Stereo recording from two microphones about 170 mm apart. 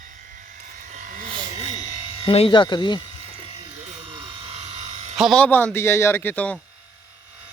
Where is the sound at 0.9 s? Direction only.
50° right (ahead or behind).